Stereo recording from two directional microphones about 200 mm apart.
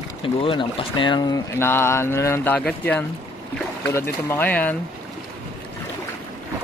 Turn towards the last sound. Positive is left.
turn(degrees=10)  # may be behind; listen again after turning